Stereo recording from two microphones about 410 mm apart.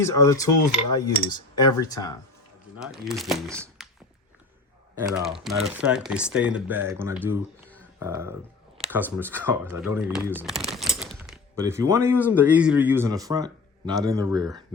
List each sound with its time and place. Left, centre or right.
0.0 s speech: centre
0.5 s cutlery: left
1.3 s speech: centre
4.9 s speech: centre